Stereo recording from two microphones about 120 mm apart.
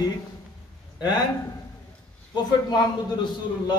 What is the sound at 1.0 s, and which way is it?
Speech, 35° left (ahead or behind).